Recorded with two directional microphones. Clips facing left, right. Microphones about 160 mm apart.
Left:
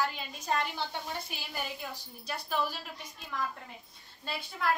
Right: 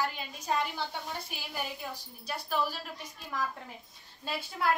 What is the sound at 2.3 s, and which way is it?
Speech, 5° right (ahead or behind).